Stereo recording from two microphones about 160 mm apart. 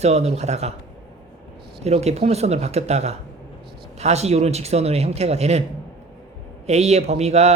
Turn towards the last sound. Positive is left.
turn(degrees=-45)  # may be behind; listen again after turning